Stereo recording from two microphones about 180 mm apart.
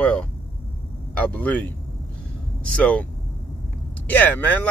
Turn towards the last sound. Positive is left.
turn(degrees=10)  # may be behind; listen again after turning